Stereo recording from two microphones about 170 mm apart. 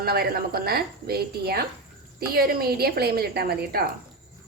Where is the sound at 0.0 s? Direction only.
65° right (ahead or behind).